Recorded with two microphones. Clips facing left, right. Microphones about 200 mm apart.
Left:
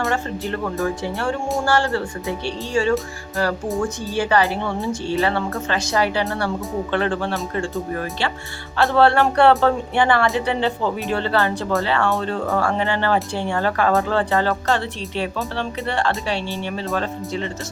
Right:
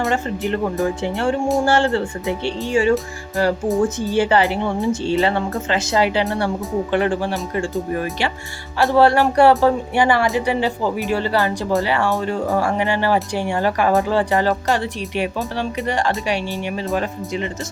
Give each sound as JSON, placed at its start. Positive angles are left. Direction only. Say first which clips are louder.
{"t": 0.1, "sound": "speech", "louder": "right 3 dB", "side_deg": -20}
{"t": 4.1, "sound": "speech", "louder": "even", "side_deg": -20}
{"t": 8.8, "sound": "music", "louder": "right 2 dB", "side_deg": 0}
{"t": 9.3, "sound": "speech", "louder": "right 2 dB", "side_deg": -10}